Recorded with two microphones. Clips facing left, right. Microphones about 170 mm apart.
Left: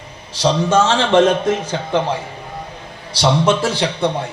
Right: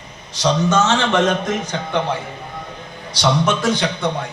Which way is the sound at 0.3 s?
30° left (ahead or behind).